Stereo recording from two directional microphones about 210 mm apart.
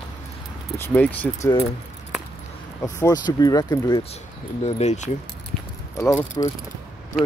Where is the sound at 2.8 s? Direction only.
15° left (ahead or behind).